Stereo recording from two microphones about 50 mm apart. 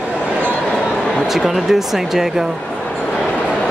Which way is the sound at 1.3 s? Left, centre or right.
Centre.